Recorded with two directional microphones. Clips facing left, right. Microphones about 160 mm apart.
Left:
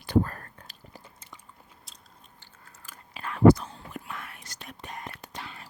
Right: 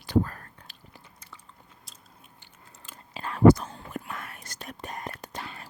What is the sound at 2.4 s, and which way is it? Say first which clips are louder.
Chewing: even; 20° right (ahead or behind).